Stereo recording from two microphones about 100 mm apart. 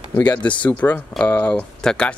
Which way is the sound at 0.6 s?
15° left (ahead or behind).